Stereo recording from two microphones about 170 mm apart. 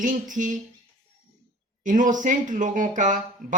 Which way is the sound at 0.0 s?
50° right (ahead or behind).